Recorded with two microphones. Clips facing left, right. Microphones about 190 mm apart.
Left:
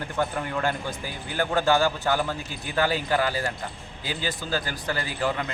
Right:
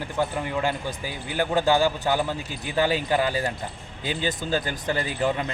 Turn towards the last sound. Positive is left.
turn(degrees=-20)  # may be behind; listen again after turning